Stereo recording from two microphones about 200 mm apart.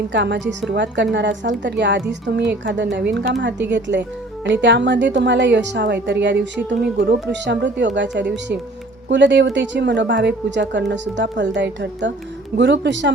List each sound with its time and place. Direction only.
0.1 s a woman's voice: 60° right (ahead or behind)